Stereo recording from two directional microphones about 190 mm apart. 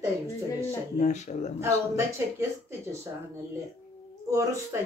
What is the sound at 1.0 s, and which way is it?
Speech, 40° left (ahead or behind).